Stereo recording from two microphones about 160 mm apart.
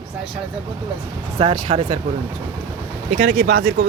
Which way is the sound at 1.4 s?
35° right (ahead or behind).